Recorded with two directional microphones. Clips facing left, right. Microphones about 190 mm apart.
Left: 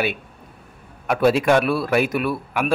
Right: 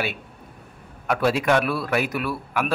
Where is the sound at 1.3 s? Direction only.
30° left (ahead or behind).